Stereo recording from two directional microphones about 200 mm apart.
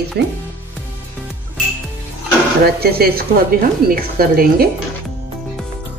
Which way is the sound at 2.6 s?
50° right (ahead or behind).